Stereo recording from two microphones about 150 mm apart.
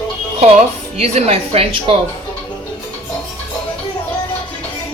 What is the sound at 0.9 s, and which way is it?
Speech, 45° right (ahead or behind).